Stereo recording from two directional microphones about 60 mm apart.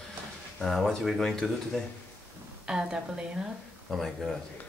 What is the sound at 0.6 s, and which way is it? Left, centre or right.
Speech, centre.